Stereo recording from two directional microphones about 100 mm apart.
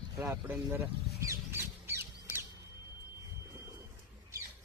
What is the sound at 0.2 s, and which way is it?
Speech, 25° right (ahead or behind).